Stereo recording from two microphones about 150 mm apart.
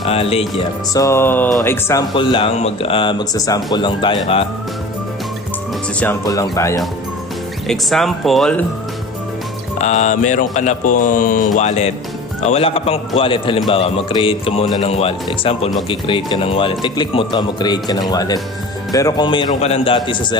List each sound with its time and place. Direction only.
0.0 s speech: 40° left (ahead or behind)
0.9 s speech: 20° left (ahead or behind)
2.1 s speech: 35° left (ahead or behind)
6.2 s speech: 25° left (ahead or behind)
7.7 s speech: centre (ahead or behind)
9.7 s speech: 50° left (ahead or behind); by 19.5 s 30° left (ahead or behind)
19.6 s speech: 40° left (ahead or behind)